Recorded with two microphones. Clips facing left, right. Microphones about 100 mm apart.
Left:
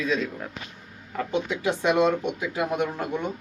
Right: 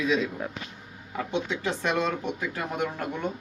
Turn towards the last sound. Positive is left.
turn(degrees=10)  # may be behind; listen again after turning